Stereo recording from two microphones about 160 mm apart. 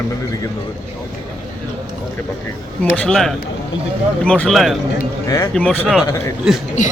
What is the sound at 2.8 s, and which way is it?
Speech, 10° left (ahead or behind).